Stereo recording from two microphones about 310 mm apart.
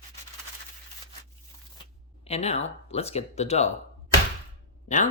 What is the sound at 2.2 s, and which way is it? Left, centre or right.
Speech, centre.